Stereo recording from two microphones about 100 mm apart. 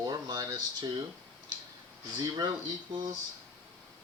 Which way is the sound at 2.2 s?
40° right (ahead or behind).